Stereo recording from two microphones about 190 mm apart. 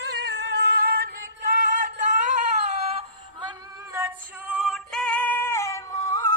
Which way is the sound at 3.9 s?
10° right (ahead or behind).